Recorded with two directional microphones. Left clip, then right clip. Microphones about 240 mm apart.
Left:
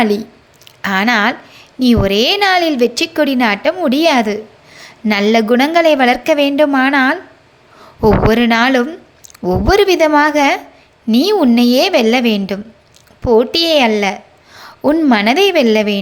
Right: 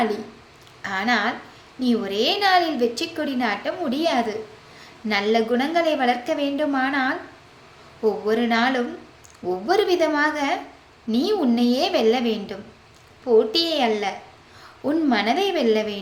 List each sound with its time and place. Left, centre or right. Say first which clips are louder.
0.8 s a woman's voice: left 9 dB; left